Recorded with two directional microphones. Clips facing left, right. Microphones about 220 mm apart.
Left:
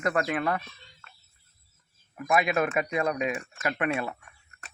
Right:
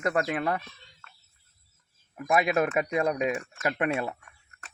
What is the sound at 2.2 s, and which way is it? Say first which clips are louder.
Speech: right 1 dB; 35° right (ahead or behind).